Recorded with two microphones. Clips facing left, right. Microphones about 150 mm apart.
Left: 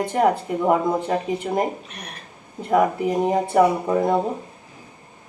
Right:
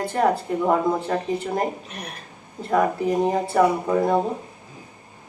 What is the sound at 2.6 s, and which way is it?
Speech, 10° left (ahead or behind).